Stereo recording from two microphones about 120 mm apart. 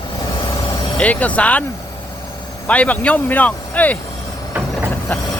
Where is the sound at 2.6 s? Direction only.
10° left (ahead or behind).